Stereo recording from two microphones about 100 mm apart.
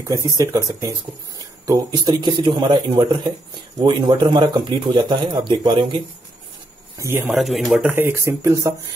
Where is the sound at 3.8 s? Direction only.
50° right (ahead or behind).